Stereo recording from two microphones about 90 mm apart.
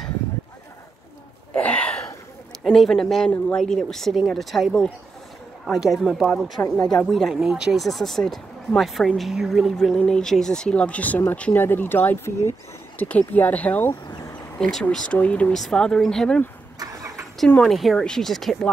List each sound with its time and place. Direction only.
1.5 s a sound: 15° left (ahead or behind)
2.6 s speech: centre (ahead or behind)
9.9 s speech: 5° left (ahead or behind)
14.0 s a sound: 40° left (ahead or behind)
14.6 s speech: 5° left (ahead or behind)
15.1 s speech: 15° left (ahead or behind)
15.5 s speech: 5° left (ahead or behind)
16.8 s vehicle: 40° right (ahead or behind)
17.6 s speech: centre (ahead or behind)